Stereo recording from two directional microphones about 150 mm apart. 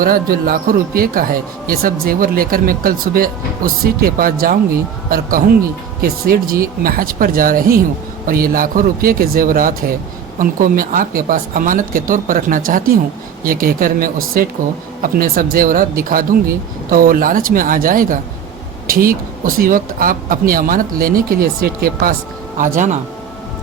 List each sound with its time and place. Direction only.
0.0 s speech: 70° right (ahead or behind)
6.0 s speech: 80° right
22.5 s speech: 60° right (ahead or behind)